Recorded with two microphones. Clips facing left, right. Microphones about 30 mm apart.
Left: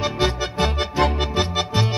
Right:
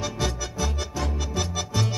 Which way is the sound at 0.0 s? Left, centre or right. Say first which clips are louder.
Left 7 dB; left.